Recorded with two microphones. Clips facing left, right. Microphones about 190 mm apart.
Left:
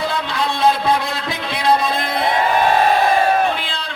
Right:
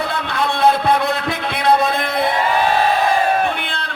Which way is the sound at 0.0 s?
60° right (ahead or behind).